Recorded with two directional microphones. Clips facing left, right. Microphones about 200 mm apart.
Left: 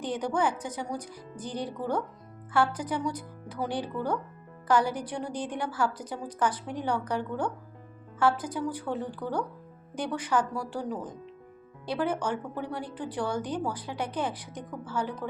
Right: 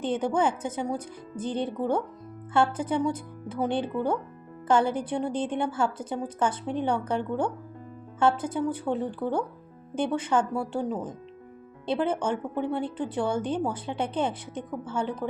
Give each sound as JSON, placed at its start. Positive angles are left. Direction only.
{"t": 0.0, "sound": "a woman's voice", "side_deg": -25}